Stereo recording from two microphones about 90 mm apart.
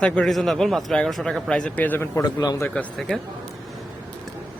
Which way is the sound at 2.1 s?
45° left (ahead or behind).